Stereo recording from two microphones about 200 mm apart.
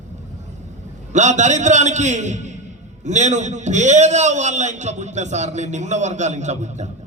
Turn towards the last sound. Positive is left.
turn(degrees=-35)  # may be behind; listen again after turning